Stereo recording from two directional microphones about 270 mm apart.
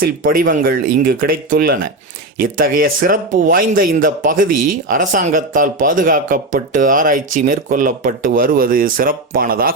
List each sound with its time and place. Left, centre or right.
0.0 s speech: right
4.5 s speech: right
4.9 s speech: right